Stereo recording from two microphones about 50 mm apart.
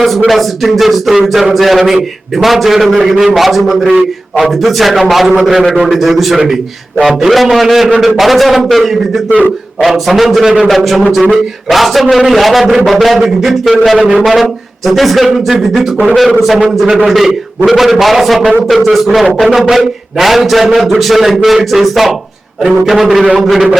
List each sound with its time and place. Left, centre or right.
0.3 s a man's voice: centre
13.9 s a man's voice: centre
14.3 s a man's voice: centre